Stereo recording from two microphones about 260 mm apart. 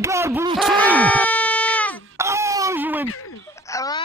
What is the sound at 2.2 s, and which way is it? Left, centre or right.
Wail, centre.